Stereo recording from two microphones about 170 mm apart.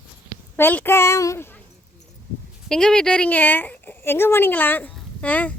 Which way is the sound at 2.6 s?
5° left (ahead or behind).